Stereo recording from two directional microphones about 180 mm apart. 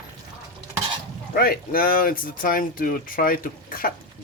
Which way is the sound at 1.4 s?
55° left (ahead or behind).